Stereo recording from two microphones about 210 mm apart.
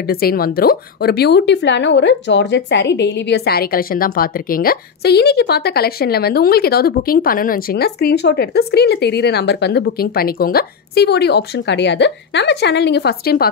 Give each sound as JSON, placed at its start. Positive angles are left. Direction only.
{"t": 0.0, "sound": "speech", "side_deg": 45}